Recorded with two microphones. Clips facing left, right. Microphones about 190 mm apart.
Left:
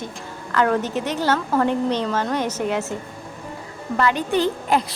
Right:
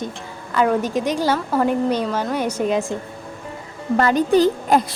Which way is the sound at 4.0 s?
40° right (ahead or behind).